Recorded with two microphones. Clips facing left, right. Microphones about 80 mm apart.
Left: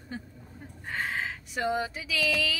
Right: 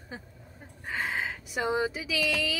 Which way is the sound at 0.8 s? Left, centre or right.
Centre.